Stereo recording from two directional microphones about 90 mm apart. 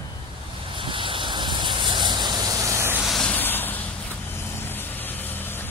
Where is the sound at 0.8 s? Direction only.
70° right (ahead or behind); by 2.9 s 30° right (ahead or behind).